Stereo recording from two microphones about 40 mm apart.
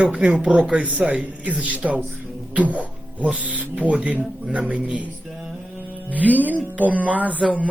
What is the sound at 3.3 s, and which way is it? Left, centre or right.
Speech, right.